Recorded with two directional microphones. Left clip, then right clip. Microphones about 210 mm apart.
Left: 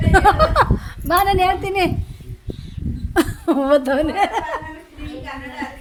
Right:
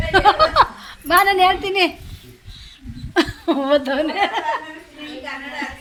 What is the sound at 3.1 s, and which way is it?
Speech, 40° left (ahead or behind).